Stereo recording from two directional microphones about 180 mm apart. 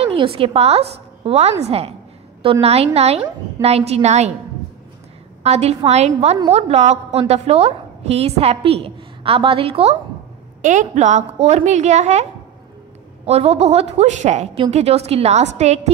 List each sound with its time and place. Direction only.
0.0 s a woman's voice: 30° right (ahead or behind)
5.4 s a woman's voice: 35° right (ahead or behind)
10.6 s a woman's voice: 45° right (ahead or behind)